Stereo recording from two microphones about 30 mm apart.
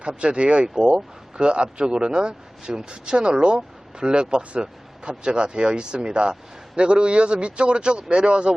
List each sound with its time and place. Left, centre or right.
0.0 s speech: right